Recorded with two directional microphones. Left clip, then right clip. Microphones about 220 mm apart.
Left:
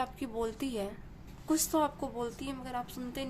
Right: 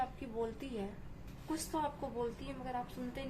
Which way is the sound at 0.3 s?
45° left (ahead or behind).